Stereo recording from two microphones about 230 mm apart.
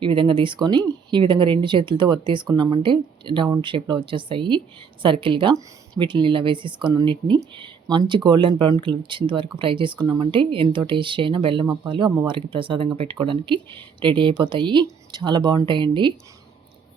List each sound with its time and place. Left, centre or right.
0.0 s speech: right